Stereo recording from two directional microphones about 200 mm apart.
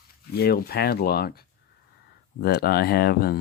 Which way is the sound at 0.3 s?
50° left (ahead or behind).